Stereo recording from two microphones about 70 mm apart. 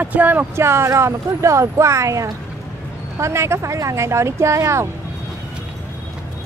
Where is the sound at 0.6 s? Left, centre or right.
Right.